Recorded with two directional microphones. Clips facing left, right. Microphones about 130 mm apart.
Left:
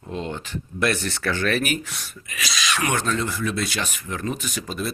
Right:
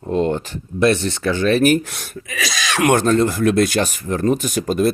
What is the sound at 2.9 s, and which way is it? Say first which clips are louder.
Speech: right 9 dB; 45° right (ahead or behind).